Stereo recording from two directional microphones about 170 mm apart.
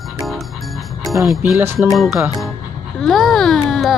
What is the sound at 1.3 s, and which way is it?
Speech, 10° right (ahead or behind).